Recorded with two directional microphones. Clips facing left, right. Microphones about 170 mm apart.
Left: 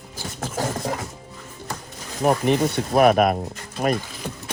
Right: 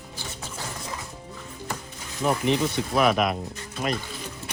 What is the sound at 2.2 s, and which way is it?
Speech, 55° left (ahead or behind).